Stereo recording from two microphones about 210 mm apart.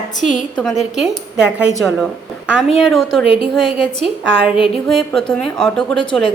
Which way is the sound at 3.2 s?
25° left (ahead or behind).